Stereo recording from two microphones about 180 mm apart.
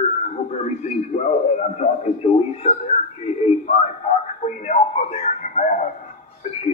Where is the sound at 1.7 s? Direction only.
35° left (ahead or behind).